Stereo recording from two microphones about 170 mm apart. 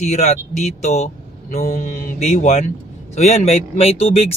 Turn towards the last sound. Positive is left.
turn(degrees=35)  # may be behind; listen again after turning